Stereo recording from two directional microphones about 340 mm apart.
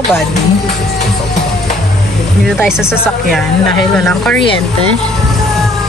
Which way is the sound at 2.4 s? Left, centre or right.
Centre.